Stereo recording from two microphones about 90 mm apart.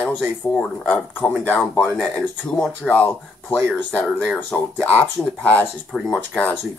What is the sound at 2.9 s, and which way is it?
Speech, 20° left (ahead or behind).